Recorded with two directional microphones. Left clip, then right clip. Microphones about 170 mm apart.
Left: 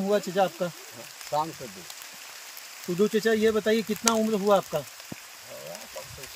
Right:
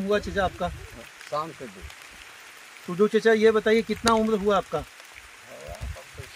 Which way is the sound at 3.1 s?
20° left (ahead or behind).